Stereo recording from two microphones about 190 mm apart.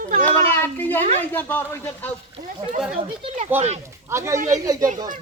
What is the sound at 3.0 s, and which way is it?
Speech, 30° right (ahead or behind).